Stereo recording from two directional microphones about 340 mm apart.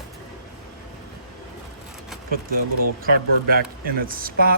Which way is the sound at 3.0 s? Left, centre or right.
Right.